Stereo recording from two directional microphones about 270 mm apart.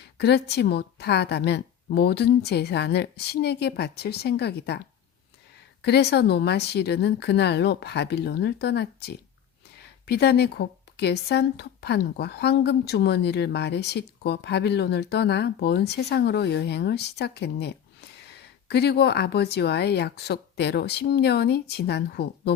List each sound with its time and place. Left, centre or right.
0.0 s speech: left
5.8 s speech: left